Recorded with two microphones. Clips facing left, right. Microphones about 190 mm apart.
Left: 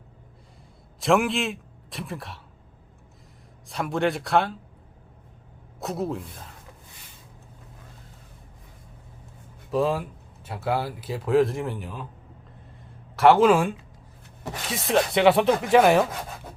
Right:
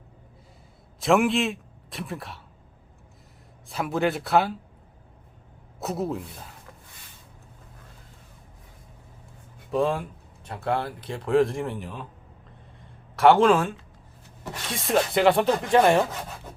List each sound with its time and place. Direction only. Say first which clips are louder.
0.9 s a man's voice: right 1 dB; centre (ahead or behind)
3.7 s speech: even; centre (ahead or behind)
5.8 s speech: even; centre (ahead or behind)
9.7 s speech: even; centre (ahead or behind)
13.1 s speech: left 1 dB; centre (ahead or behind)